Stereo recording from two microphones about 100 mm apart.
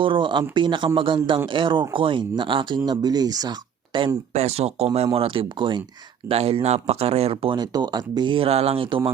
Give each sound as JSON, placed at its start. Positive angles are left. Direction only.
{"t": 0.0, "sound": "speech", "side_deg": -55}
{"t": 3.9, "sound": "speech", "side_deg": -50}
{"t": 4.4, "sound": "speech", "side_deg": -90}
{"t": 5.1, "sound": "speech", "side_deg": -65}
{"t": 6.2, "sound": "speech", "side_deg": -85}
{"t": 7.5, "sound": "speech", "side_deg": -45}
{"t": 8.4, "sound": "speech", "side_deg": -90}